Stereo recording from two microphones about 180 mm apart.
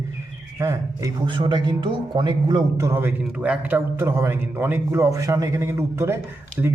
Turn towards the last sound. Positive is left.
turn(degrees=-10)  # may be behind; listen again after turning